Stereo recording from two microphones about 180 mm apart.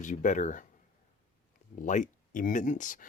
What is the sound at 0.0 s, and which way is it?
Speech, 45° left (ahead or behind).